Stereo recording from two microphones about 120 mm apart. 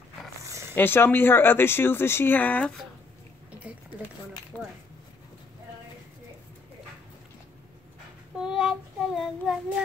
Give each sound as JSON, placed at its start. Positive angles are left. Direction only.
{"t": 0.4, "sound": "a sound", "side_deg": -25}
{"t": 0.7, "sound": "speech", "side_deg": 20}
{"t": 4.5, "sound": "speech", "side_deg": 15}
{"t": 8.4, "sound": "child singing", "side_deg": -5}